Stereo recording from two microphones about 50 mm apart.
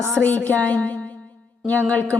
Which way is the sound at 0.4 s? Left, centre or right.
Left.